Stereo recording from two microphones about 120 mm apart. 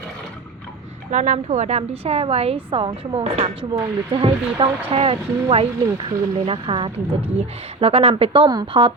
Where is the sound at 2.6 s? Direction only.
45° right (ahead or behind).